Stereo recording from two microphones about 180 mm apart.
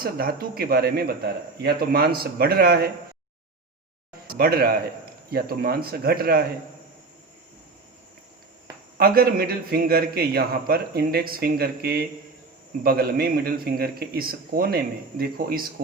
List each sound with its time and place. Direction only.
0.0 s a man's voice: 55° right (ahead or behind)
4.3 s a man's voice: 55° right (ahead or behind)
9.0 s a man's voice: 60° right (ahead or behind)